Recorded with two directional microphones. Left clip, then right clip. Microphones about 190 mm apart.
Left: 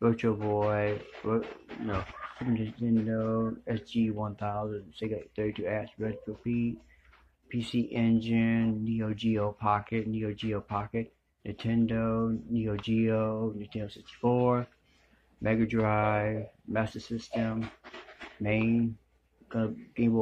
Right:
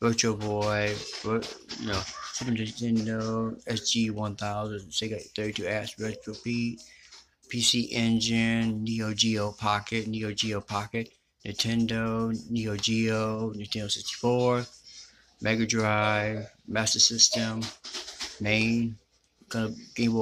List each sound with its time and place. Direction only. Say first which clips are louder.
0.0 s speech: right 1 dB; 15° right (ahead or behind)
2.5 s speech: even; 10° right (ahead or behind)
16.9 s speech: right 19 dB; 20° left (ahead or behind)
18.4 s speech: right 3 dB; 10° right (ahead or behind)